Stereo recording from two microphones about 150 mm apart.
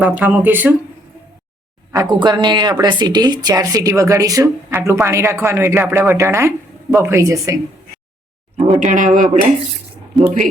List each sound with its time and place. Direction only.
0.0 s speech: 10° right (ahead or behind)
1.9 s speech: 25° right (ahead or behind)
8.5 s speech: 55° right (ahead or behind)